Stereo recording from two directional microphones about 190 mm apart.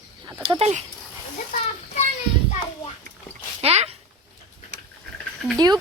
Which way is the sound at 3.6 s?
35° right (ahead or behind).